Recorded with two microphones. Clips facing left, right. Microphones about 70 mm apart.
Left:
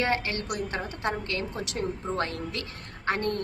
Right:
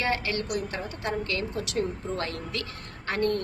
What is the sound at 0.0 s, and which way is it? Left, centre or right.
A woman's voice, left.